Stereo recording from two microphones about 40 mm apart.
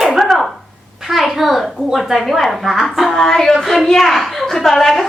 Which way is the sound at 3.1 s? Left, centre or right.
Centre.